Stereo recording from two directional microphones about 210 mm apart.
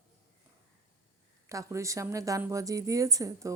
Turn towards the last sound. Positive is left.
turn(degrees=-15)  # may be behind; listen again after turning